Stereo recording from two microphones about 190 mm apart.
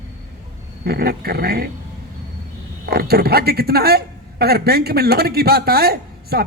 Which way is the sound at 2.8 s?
55° right (ahead or behind).